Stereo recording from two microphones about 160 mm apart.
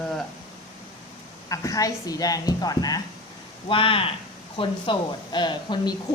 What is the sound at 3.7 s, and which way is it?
Speech, 35° left (ahead or behind).